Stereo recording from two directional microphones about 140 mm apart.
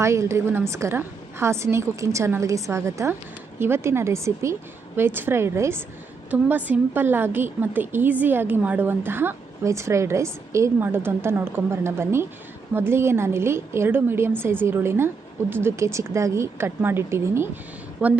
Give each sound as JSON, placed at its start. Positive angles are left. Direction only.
{"t": 0.0, "sound": "a woman's voice", "side_deg": -20}